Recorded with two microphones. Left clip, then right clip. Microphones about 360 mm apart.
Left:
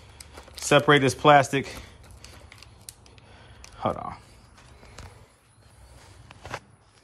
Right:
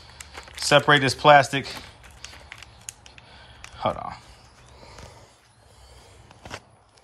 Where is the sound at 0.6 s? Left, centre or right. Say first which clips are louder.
Right 1 dB; centre.